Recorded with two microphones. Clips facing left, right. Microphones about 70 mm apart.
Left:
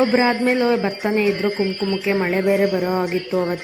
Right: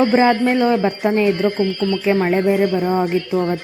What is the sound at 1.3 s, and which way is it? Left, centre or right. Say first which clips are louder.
A man's voice: right 2 dB; left.